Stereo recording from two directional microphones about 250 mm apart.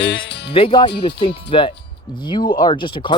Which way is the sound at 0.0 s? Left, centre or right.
Left.